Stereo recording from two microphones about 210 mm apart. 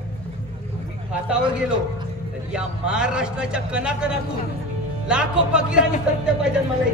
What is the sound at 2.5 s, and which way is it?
A man's voice, 5° right (ahead or behind).